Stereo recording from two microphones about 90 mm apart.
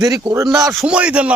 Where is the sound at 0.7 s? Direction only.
5° right (ahead or behind).